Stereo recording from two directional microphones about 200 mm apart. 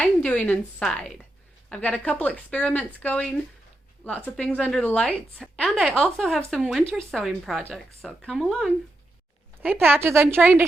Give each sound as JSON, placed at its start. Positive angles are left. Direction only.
{"t": 0.0, "sound": "a woman's voice", "side_deg": 5}
{"t": 9.6, "sound": "a woman's voice", "side_deg": -10}